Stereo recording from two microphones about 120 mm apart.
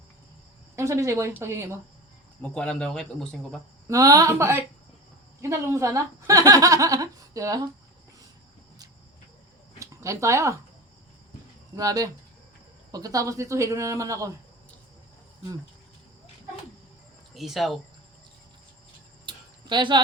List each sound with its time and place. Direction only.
0.8 s a woman's voice: 25° right (ahead or behind)
2.4 s speech: 5° left (ahead or behind)
3.8 s a woman's voice: 30° right (ahead or behind)
9.7 s a sound: 25° right (ahead or behind)
11.8 s a woman's voice: 30° right (ahead or behind)
17.3 s speech: centre (ahead or behind)
19.2 s a sound: 40° right (ahead or behind)